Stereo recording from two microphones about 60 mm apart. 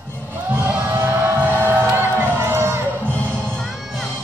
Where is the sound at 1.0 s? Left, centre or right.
Right.